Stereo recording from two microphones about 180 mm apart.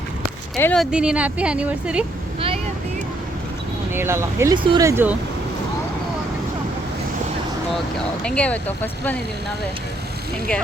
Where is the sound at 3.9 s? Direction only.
15° right (ahead or behind).